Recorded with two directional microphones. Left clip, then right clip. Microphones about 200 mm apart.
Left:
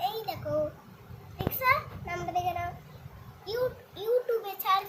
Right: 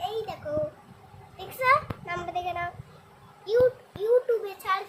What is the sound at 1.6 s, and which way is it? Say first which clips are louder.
A child's voice: right 4 dB; 30° right (ahead or behind).